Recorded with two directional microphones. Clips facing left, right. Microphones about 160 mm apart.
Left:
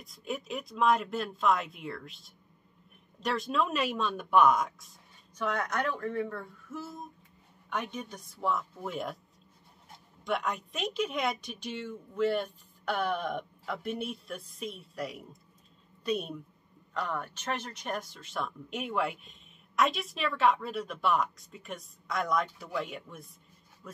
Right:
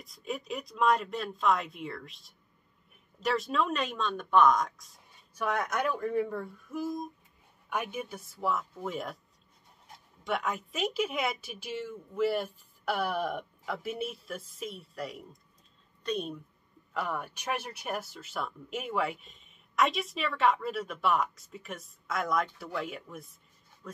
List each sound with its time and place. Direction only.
0.0 s speech: centre (ahead or behind)
5.3 s speech: 10° right (ahead or behind)
10.2 s a woman's voice: centre (ahead or behind)
16.9 s speech: 10° right (ahead or behind)